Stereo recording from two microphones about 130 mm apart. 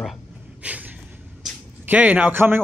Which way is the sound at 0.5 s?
10° right (ahead or behind).